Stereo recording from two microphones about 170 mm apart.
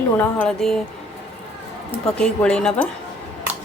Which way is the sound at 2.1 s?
5° left (ahead or behind).